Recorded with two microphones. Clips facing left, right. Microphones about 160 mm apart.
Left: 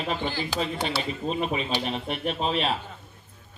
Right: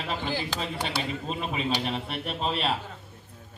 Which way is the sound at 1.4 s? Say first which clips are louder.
Right 1 dB; centre (ahead or behind).